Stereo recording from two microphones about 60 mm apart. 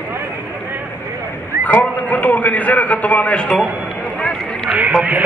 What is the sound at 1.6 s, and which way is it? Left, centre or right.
A man's voice, left.